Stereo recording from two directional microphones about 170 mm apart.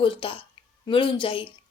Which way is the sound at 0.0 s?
30° left (ahead or behind).